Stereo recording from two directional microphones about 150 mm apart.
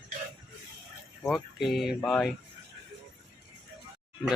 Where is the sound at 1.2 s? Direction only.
Centre (ahead or behind).